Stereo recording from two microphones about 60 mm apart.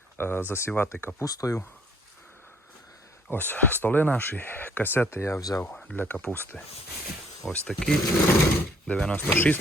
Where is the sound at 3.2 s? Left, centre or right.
Left.